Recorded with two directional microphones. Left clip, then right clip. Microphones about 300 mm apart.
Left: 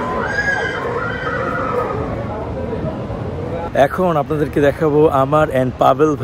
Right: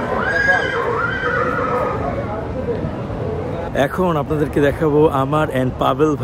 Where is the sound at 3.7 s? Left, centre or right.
Centre.